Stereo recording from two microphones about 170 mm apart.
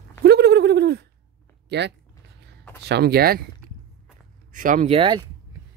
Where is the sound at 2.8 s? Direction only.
70° right (ahead or behind).